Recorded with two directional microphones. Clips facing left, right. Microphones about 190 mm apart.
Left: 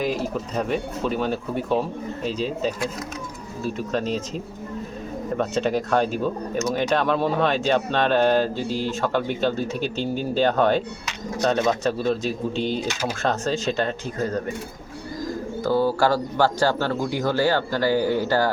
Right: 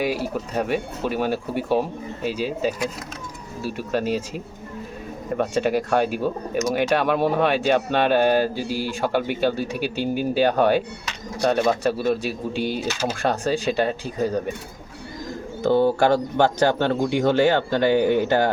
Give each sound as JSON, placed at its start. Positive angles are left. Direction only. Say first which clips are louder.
{"t": 0.0, "sound": "speech", "louder": "right 1 dB", "side_deg": -5}
{"t": 5.4, "sound": "speech", "louder": "right 2 dB", "side_deg": -10}
{"t": 15.6, "sound": "speech", "louder": "right 3 dB", "side_deg": -25}